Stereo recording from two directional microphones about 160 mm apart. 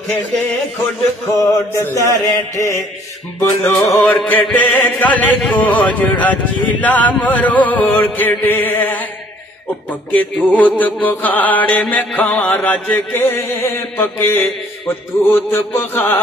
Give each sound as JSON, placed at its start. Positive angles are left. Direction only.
{"t": 1.3, "sound": "mantra", "side_deg": 20}
{"t": 3.6, "sound": "music", "side_deg": 15}